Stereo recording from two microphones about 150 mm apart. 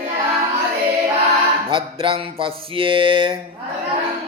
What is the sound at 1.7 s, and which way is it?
Mantra, 35° right (ahead or behind).